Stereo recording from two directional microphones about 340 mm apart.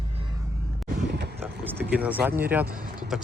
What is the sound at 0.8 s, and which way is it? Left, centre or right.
Vehicle, right.